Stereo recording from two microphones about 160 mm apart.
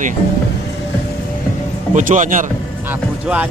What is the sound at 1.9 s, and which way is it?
Speech, 50° right (ahead or behind).